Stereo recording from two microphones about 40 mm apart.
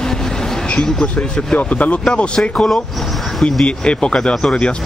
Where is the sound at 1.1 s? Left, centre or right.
Left.